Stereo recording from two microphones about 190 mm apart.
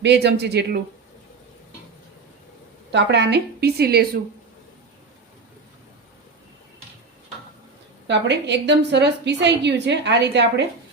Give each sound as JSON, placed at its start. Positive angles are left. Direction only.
{"t": 0.0, "sound": "a woman's voice", "side_deg": -65}
{"t": 2.9, "sound": "a woman's voice", "side_deg": -65}
{"t": 8.0, "sound": "a woman's voice", "side_deg": -65}